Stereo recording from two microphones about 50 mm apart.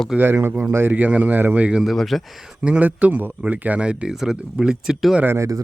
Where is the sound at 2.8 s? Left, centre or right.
Right.